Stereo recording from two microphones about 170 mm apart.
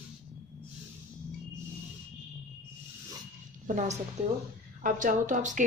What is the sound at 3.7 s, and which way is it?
Speech, 50° right (ahead or behind).